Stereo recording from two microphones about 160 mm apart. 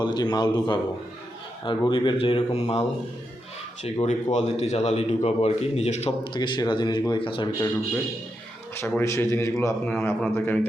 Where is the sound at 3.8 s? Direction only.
40° left (ahead or behind).